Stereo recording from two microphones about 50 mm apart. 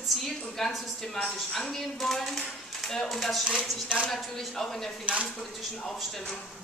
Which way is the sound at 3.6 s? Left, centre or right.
Right.